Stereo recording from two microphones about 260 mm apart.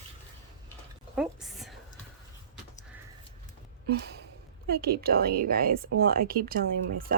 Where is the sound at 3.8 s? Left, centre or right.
Right.